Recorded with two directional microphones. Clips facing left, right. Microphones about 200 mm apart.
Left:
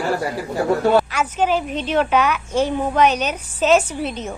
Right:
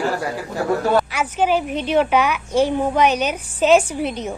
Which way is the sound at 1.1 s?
10° right (ahead or behind).